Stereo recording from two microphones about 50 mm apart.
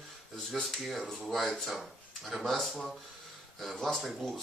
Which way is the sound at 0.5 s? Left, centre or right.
Centre.